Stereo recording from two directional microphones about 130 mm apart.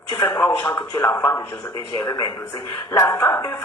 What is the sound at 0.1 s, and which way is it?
Speech, 25° left (ahead or behind).